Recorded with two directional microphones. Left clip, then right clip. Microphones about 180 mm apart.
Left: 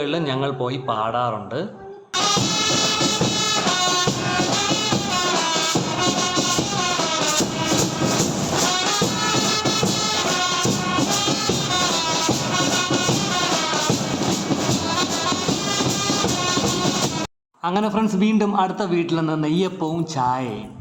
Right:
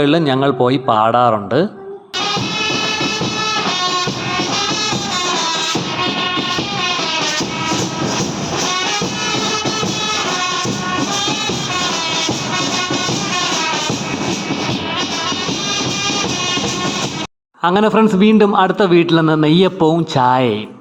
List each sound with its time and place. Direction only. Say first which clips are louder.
0.0 s speech: right 9 dB; 40° right (ahead or behind)
17.7 s speech: right 9 dB; 40° right (ahead or behind)